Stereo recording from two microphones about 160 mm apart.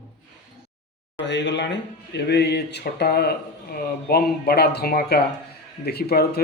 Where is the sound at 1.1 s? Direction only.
90° left.